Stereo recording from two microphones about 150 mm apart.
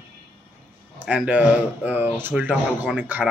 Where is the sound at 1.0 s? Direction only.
10° right (ahead or behind).